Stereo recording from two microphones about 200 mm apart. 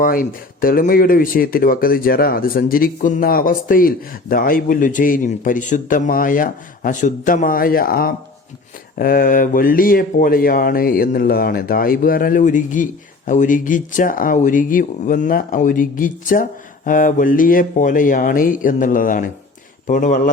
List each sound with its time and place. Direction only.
0.0 s a man's voice: 45° left (ahead or behind)